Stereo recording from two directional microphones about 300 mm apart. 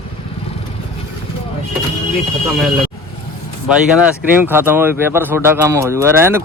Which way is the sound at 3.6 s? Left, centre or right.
Centre.